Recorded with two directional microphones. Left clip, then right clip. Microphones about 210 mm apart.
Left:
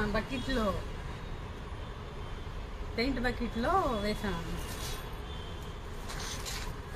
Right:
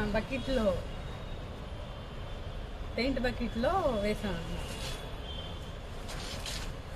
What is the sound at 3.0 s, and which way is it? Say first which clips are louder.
Speech: even; 20° right (ahead or behind).